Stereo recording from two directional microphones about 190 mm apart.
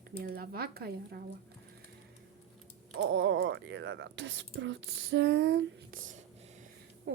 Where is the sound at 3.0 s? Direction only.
75° right (ahead or behind).